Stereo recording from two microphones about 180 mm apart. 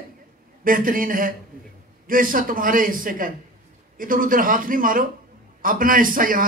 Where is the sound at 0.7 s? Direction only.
50° right (ahead or behind).